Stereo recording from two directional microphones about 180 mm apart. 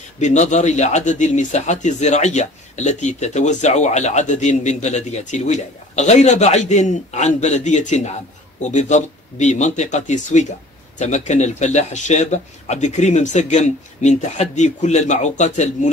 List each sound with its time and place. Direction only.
0.2 s speech: 40° left (ahead or behind)